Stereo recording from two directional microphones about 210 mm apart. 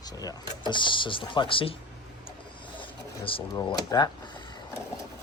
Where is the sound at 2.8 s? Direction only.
25° left (ahead or behind).